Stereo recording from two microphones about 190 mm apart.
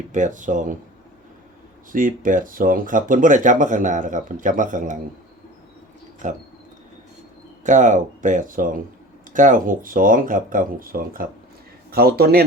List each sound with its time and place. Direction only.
0.1 s speech: 40° right (ahead or behind)
1.9 s speech: 45° right (ahead or behind)
6.2 s speech: 40° right (ahead or behind)
7.6 s speech: 40° right (ahead or behind)